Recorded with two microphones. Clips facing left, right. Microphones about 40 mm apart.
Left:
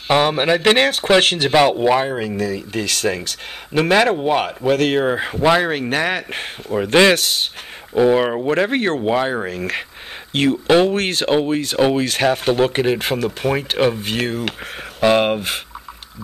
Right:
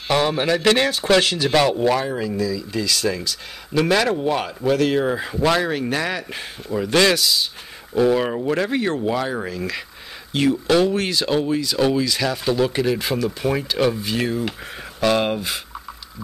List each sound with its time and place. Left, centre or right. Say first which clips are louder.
0.1 s speech: left 3 dB; left
2.0 s speech: left 3 dB; left
2.3 s speech: left 1 dB; left
3.7 s speech: left 3 dB; left
4.7 s speech: left 2 dB; left
6.9 s speech: left 4 dB; left
7.2 s speech: even; left
7.9 s speech: left 3 dB; left
8.5 s speech: left 3 dB; left
9.1 s speech: left 4 dB; left
11.0 s speech: left 3 dB; left
13.9 s speech: left 1 dB; left
15.0 s speech: left 4 dB; left